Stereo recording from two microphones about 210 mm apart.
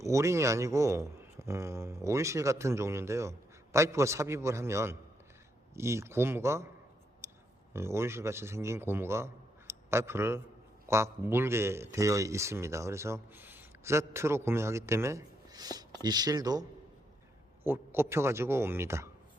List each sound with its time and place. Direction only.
0.0 s speech: 15° right (ahead or behind)
7.7 s a man's voice: 10° right (ahead or behind)